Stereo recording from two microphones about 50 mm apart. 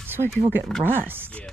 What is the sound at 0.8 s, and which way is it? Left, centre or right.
Speech, right.